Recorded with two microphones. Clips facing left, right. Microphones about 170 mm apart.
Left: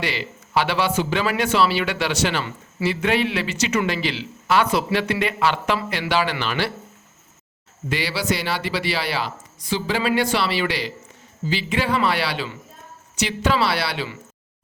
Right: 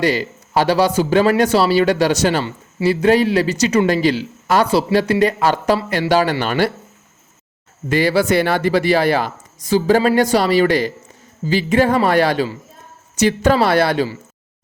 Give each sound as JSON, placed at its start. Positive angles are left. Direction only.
{"t": 0.0, "sound": "speech", "side_deg": -45}
{"t": 7.9, "sound": "speech", "side_deg": -50}